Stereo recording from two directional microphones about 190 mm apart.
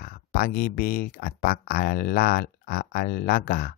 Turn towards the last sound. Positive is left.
turn(degrees=55)  # may be behind; listen again after turning